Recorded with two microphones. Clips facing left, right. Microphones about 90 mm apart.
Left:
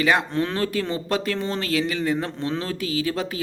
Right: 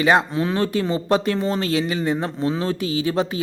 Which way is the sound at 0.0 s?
25° right (ahead or behind).